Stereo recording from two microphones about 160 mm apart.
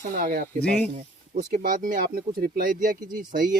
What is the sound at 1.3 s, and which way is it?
Speech, 60° right (ahead or behind).